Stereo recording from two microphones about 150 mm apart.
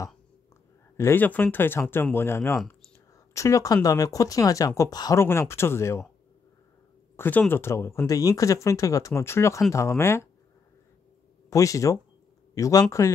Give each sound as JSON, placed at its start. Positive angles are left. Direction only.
{"t": 0.9, "sound": "speech", "side_deg": 15}
{"t": 7.2, "sound": "speech", "side_deg": 10}
{"t": 11.5, "sound": "speech", "side_deg": 20}